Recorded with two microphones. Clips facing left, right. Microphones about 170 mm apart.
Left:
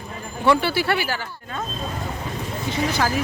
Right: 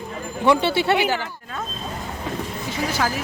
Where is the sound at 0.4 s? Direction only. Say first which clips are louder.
Right 1 dB; 20° right (ahead or behind).